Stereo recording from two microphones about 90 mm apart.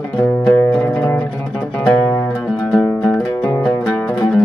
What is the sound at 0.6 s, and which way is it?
Music, 15° left (ahead or behind).